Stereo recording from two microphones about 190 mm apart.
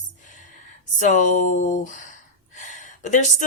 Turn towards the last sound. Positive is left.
turn(degrees=40)  # may be behind; listen again after turning